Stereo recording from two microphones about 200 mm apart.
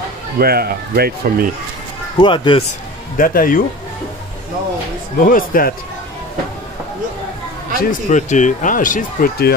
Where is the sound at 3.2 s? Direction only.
45° left (ahead or behind).